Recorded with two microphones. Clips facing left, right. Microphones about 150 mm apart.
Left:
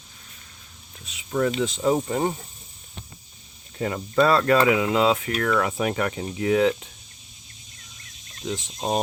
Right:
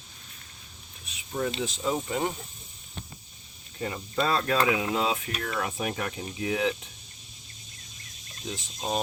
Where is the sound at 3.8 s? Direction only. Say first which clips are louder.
Left 8 dB; 65° left (ahead or behind).